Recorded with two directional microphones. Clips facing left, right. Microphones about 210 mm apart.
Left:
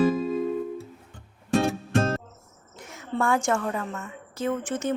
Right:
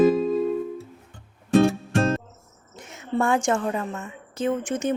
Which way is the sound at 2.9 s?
20° right (ahead or behind).